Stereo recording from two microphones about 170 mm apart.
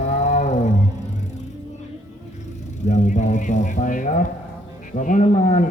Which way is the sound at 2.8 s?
45° left (ahead or behind).